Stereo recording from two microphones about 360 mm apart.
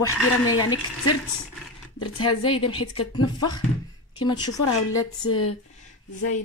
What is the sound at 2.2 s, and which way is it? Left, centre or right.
Speech, left.